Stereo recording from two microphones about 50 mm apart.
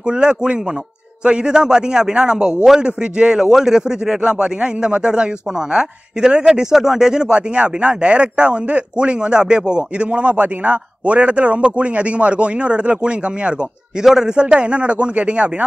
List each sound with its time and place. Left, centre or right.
0.0 s a man's voice: centre